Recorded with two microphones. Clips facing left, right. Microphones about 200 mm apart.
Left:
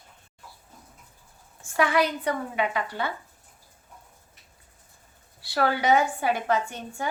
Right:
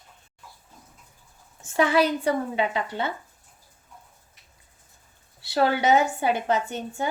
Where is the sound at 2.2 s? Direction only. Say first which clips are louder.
Right 3 dB; 25° right (ahead or behind).